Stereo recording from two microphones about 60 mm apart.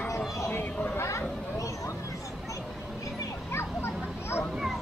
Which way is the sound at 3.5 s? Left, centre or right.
Left.